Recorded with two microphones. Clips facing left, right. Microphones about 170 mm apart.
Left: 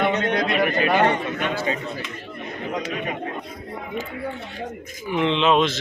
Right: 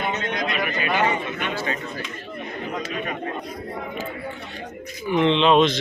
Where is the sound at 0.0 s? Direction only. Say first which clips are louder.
Left 5 dB; 65° left (ahead or behind).